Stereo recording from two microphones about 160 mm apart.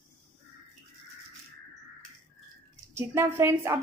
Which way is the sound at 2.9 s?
15° right (ahead or behind).